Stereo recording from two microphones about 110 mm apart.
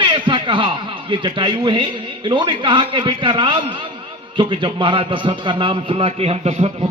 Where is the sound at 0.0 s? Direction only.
50° right (ahead or behind).